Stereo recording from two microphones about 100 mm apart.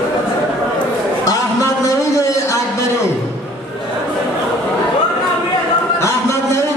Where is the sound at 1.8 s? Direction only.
30° left (ahead or behind).